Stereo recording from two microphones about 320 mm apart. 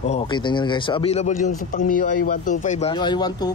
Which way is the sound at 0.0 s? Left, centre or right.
Centre.